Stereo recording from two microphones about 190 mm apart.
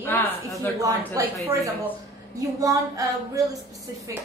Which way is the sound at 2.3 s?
20° right (ahead or behind).